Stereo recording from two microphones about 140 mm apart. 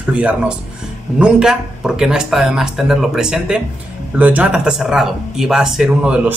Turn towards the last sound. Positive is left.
turn(degrees=-5)  # may be behind; listen again after turning